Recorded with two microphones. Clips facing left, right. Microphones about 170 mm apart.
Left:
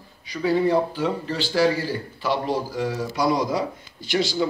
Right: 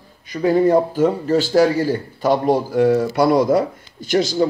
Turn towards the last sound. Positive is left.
turn(degrees=-45)  # may be behind; listen again after turning